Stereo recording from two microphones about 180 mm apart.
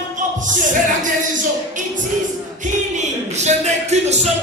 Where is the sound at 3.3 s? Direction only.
40° right (ahead or behind).